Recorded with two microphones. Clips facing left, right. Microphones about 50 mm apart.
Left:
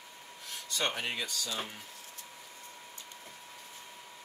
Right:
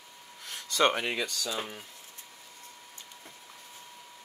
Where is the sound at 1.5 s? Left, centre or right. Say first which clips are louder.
Right 3 dB; right.